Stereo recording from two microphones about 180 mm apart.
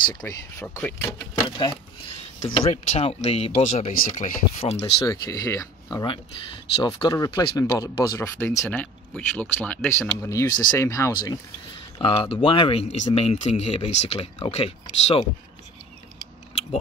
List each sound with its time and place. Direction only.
0.0 s speech: 20° left (ahead or behind)
2.4 s speech: 35° left (ahead or behind)
5.0 s speech: 20° left (ahead or behind)
12.0 s speech: 30° left (ahead or behind)
12.9 s speech: 35° left (ahead or behind)